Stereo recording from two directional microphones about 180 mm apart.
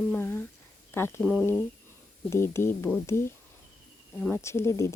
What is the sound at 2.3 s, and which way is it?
Speech, 15° left (ahead or behind).